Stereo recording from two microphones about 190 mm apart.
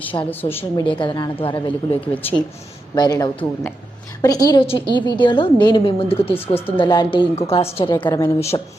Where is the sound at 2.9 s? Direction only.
20° left (ahead or behind).